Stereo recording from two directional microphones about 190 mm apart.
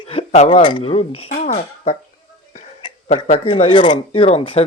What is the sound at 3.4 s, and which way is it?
Speech, 25° left (ahead or behind).